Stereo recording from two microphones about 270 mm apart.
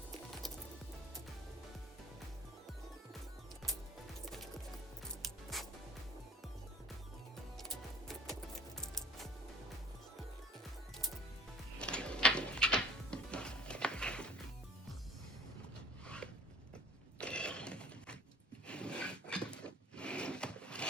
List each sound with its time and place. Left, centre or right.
5.2 s music: centre
7.5 s music: centre
11.8 s music: centre
16.0 s a sound: centre